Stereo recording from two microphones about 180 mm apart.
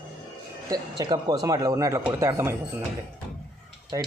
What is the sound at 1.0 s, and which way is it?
Speech, 20° right (ahead or behind).